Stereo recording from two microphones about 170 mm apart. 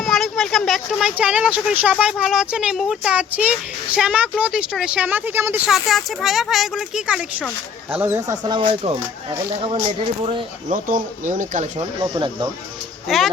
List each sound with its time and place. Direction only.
0.0 s speech: centre (ahead or behind)
5.6 s speech: centre (ahead or behind); by 9.0 s 35° right (ahead or behind)
10.7 s speech: 50° right (ahead or behind)
13.1 s speech: centre (ahead or behind)